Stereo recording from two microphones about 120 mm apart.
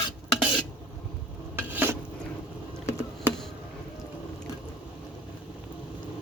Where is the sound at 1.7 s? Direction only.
15° right (ahead or behind).